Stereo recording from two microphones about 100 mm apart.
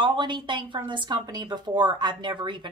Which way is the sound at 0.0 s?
50° right (ahead or behind).